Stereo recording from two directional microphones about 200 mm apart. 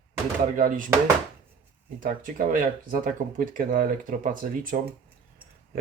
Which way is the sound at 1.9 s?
40° right (ahead or behind).